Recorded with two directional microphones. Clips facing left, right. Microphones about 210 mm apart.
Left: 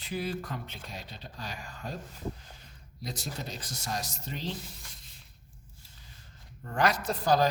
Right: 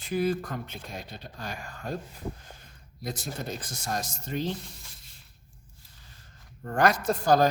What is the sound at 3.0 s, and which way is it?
A man's voice, 50° right (ahead or behind).